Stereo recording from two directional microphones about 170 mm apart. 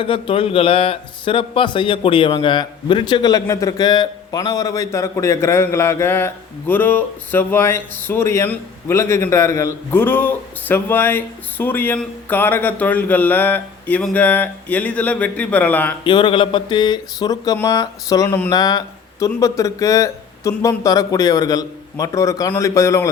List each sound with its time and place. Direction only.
0.0 s speech: 30° left (ahead or behind); by 16.0 s 10° left (ahead or behind)
16.0 s speech: 30° left (ahead or behind)